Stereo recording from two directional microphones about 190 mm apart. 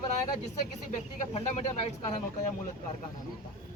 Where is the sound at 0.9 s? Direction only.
35° left (ahead or behind).